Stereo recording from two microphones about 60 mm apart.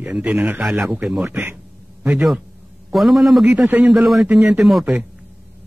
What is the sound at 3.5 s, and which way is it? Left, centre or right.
Speech, right.